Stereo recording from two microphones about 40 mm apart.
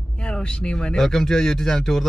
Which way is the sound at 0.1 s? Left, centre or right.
Left.